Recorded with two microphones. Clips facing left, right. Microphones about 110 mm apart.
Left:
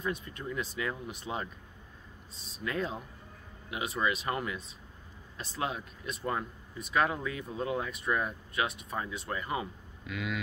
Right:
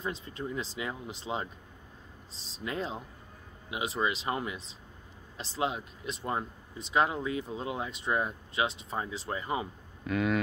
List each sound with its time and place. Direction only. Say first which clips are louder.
0.0 s speech: even; 30° right (ahead or behind)
2.6 s speech: left 1 dB; 25° right (ahead or behind)
10.0 s speech: right 8 dB; 45° right (ahead or behind)